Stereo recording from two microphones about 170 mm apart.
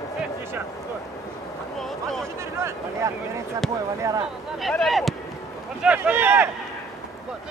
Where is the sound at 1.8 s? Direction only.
Centre (ahead or behind).